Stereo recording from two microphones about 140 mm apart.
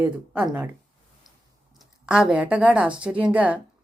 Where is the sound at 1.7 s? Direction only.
5° right (ahead or behind).